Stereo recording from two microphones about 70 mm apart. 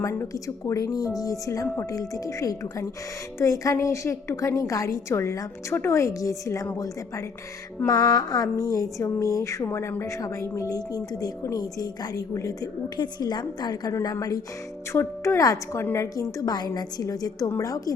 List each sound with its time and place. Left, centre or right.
0.4 s a woman's voice: left
7.9 s a woman's voice: left
8.6 s a woman's voice: left
9.6 s speech: left
10.0 s a woman's voice: left
10.7 s a woman's voice: left
13.0 s a woman's voice: left
15.2 s a woman's voice: left
15.8 s speech: left
16.1 s a woman's voice: left